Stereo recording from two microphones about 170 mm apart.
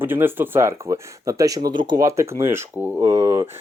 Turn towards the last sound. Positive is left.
turn(degrees=-15)  # may be behind; listen again after turning